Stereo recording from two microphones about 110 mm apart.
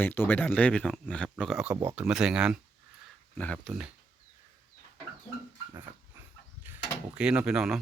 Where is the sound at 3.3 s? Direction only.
10° left (ahead or behind).